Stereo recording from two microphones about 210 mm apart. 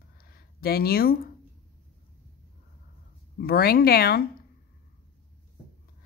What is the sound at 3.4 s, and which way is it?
Speech, 45° left (ahead or behind).